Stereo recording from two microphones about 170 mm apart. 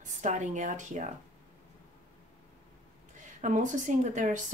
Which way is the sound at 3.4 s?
45° right (ahead or behind).